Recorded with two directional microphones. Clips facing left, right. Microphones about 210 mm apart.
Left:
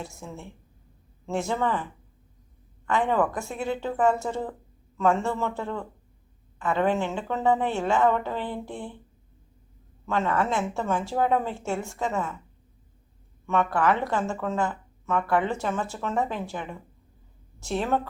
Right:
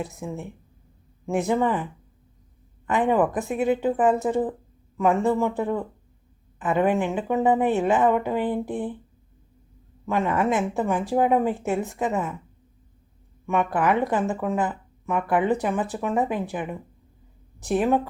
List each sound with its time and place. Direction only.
0.0 s speech: 15° right (ahead or behind)
10.1 s speech: 15° right (ahead or behind)
13.5 s speech: 15° right (ahead or behind)